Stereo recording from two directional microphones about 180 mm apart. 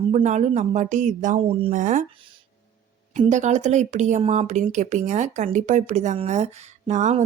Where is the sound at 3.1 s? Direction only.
40° right (ahead or behind).